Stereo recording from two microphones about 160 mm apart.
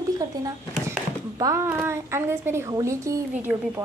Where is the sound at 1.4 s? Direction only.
20° right (ahead or behind).